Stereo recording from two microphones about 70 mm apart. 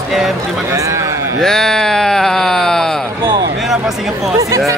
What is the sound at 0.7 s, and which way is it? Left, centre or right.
Speech, right.